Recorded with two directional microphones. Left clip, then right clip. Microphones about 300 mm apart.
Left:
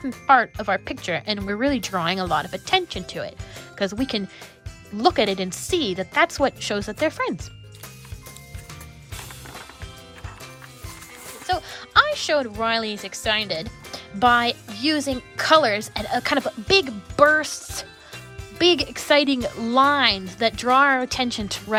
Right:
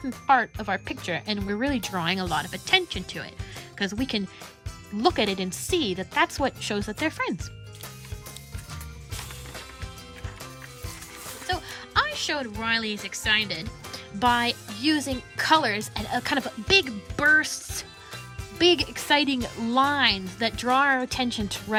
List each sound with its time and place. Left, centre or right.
0.3 s speech: left
5.0 s speech: left
11.4 s a woman's voice: left